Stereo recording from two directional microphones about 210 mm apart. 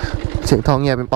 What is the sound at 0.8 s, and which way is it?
Speech, 10° right (ahead or behind).